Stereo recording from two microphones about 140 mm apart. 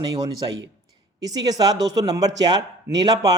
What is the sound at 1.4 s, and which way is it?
A man's voice, 30° right (ahead or behind).